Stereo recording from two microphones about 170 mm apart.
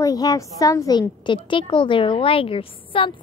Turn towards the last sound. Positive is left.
turn(degrees=30)  # may be behind; listen again after turning